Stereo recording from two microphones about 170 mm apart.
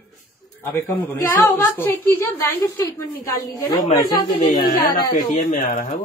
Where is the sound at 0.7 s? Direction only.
15° left (ahead or behind).